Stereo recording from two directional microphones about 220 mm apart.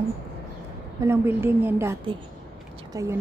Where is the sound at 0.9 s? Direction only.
10° right (ahead or behind).